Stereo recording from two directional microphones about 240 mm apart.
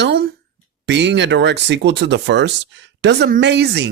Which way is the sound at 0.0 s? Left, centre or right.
Right.